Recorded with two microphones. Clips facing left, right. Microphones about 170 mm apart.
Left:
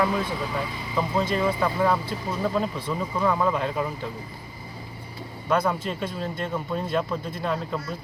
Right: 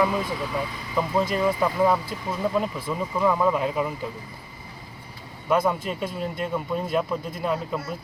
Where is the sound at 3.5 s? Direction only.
5° right (ahead or behind).